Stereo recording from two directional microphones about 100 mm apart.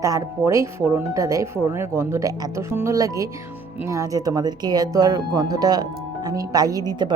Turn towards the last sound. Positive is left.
turn(degrees=-50)  # may be behind; listen again after turning